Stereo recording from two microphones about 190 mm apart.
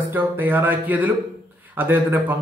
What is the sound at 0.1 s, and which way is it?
A man's voice, 10° right (ahead or behind).